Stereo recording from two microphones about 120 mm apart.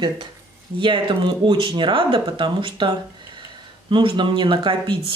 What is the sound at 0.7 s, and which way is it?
Speech, 45° right (ahead or behind).